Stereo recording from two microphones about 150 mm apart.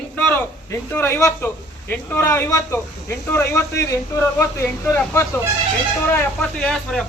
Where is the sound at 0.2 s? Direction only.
10° left (ahead or behind).